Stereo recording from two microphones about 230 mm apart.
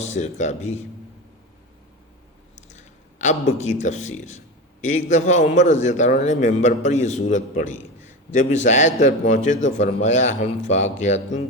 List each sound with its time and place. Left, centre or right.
0.2 s a man's voice: left
2.6 s a man's voice: left